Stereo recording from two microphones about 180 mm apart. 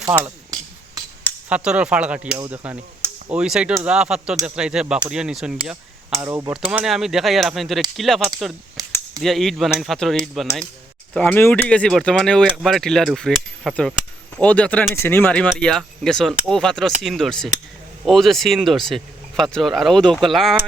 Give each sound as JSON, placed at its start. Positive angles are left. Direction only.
{"t": 0.3, "sound": "a sound", "side_deg": -20}
{"t": 1.5, "sound": "speech", "side_deg": -5}
{"t": 6.2, "sound": "speech", "side_deg": -15}
{"t": 6.7, "sound": "speech", "side_deg": -5}